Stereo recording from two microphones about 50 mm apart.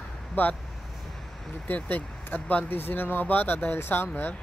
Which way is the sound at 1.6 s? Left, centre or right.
Left.